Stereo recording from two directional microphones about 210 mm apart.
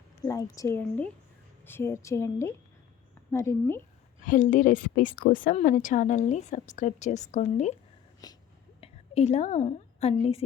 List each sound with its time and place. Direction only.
0.3 s a woman's voice: 15° left (ahead or behind)
4.3 s a woman's voice: 35° left (ahead or behind)
8.2 s speech: 20° left (ahead or behind)
8.8 s a woman's voice: 30° left (ahead or behind)